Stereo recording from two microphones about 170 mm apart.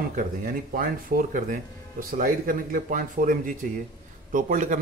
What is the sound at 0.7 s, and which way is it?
Speech, 55° right (ahead or behind).